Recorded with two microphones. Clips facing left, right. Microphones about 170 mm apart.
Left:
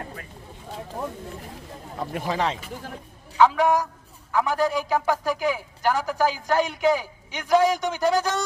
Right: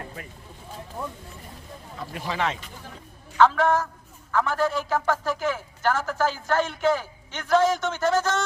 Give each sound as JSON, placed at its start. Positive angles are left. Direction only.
{"t": 2.0, "sound": "speech", "side_deg": 50}
{"t": 3.3, "sound": "speech", "side_deg": 10}